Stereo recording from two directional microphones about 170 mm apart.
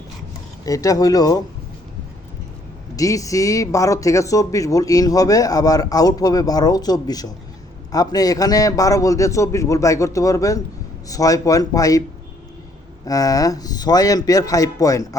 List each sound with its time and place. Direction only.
0.6 s speech: 20° left (ahead or behind)
2.9 s speech: 20° left (ahead or behind)
13.1 s speech: 20° left (ahead or behind)